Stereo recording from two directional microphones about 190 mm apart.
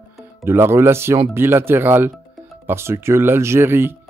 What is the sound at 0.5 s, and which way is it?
Speech, 15° right (ahead or behind).